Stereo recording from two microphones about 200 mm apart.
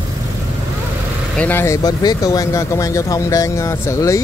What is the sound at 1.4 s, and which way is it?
Speech, 10° left (ahead or behind).